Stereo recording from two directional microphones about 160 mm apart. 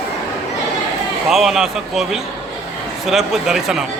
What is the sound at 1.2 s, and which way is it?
A man's voice, centre (ahead or behind).